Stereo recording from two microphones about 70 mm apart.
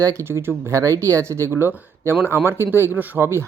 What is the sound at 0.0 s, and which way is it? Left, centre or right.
Speech, right.